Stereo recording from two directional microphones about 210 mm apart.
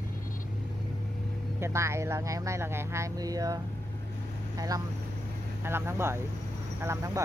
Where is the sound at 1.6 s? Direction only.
15° right (ahead or behind).